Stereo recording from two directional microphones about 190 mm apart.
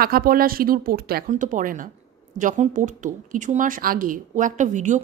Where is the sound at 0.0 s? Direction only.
50° right (ahead or behind).